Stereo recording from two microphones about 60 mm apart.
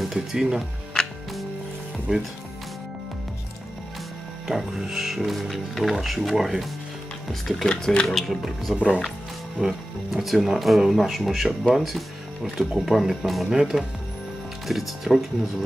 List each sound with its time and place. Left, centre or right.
0.1 s speech: centre
2.1 s speech: centre
4.5 s speech: centre
8.7 s speech: centre
9.6 s speech: centre